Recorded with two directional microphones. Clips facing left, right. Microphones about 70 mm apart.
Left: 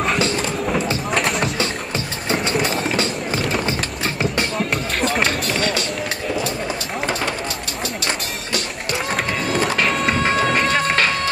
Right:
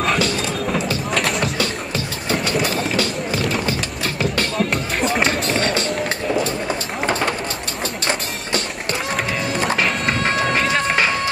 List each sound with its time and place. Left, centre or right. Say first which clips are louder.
1.1 s music: even; centre
5.2 s music: right 1 dB; right
8.9 s music: left 1 dB; centre